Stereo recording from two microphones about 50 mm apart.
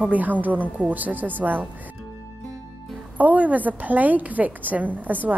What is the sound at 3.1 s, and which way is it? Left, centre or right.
A woman's voice, right.